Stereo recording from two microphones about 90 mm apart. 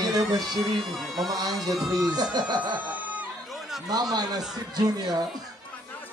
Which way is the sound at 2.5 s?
55° right (ahead or behind).